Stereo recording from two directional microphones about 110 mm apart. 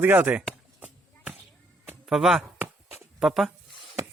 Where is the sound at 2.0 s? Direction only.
Centre (ahead or behind).